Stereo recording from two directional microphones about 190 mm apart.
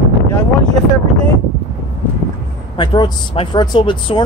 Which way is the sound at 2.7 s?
25° left (ahead or behind).